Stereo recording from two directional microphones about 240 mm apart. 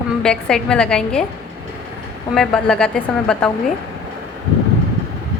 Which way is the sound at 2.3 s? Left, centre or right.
Centre.